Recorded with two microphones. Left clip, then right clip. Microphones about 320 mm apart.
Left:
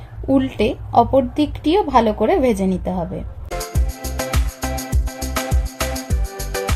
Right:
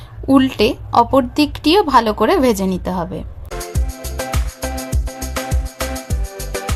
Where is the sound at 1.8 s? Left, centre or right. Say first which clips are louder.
Right 2 dB; right.